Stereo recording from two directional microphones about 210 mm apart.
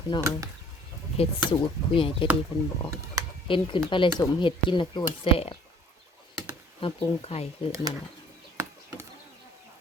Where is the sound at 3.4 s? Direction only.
25° left (ahead or behind).